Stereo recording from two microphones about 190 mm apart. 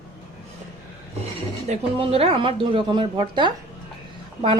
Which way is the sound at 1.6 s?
35° right (ahead or behind).